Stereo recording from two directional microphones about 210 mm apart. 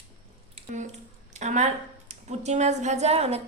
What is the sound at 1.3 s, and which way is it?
A woman's voice, 35° right (ahead or behind).